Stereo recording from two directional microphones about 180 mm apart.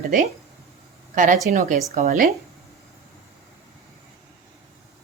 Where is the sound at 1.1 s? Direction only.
45° right (ahead or behind).